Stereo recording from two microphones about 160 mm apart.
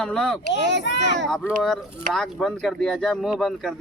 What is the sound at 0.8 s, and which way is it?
Speech, 90° left.